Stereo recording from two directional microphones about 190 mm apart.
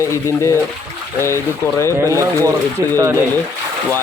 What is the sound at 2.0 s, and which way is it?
Speech, 15° right (ahead or behind).